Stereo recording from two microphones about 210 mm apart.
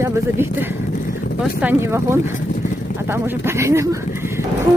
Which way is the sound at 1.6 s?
10° right (ahead or behind).